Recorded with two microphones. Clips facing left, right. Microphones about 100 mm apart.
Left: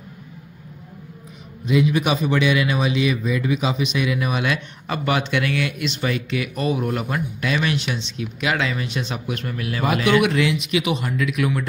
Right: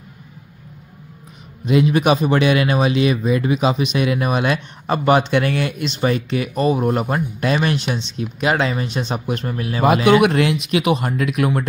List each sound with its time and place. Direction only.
1.7 s speech: 55° right (ahead or behind); by 9.8 s 30° right (ahead or behind)
10.0 s speech: 50° right (ahead or behind)